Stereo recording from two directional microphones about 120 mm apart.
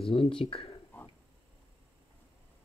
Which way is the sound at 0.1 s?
50° left (ahead or behind).